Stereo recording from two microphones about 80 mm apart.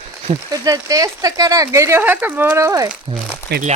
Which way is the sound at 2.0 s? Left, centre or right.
Right.